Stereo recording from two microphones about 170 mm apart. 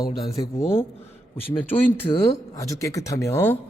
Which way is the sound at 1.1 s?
35° left (ahead or behind).